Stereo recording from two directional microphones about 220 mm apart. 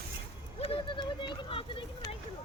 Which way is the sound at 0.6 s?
25° left (ahead or behind).